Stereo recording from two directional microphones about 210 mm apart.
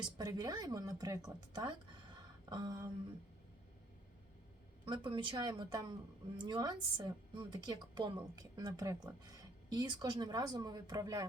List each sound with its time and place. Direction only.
0.2 s speech: 20° right (ahead or behind)
4.9 s a woman's voice: 20° right (ahead or behind)